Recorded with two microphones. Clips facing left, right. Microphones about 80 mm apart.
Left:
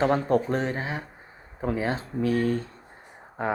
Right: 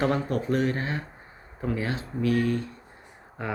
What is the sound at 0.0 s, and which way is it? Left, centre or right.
Speech, left.